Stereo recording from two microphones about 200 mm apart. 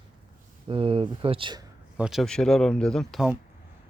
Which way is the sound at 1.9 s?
Centre (ahead or behind).